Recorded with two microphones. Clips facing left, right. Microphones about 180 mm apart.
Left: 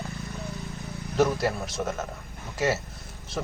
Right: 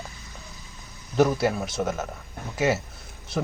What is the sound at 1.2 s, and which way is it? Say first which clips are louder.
Speech: right 3 dB; centre (ahead or behind).